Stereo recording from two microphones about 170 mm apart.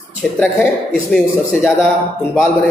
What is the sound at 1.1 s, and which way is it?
Speech, 5° right (ahead or behind).